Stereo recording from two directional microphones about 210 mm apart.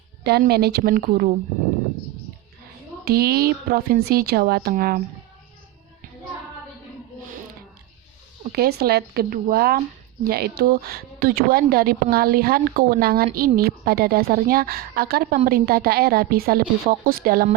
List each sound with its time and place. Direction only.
0.3 s a woman's voice: 50° right (ahead or behind)
3.0 s a woman's voice: 45° right (ahead or behind)
8.5 s a woman's voice: 45° right (ahead or behind)